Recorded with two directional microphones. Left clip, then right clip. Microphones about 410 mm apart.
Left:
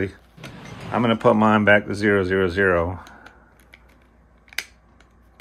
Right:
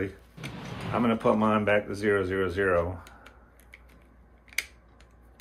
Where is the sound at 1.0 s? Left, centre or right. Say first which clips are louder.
Left 7 dB; centre.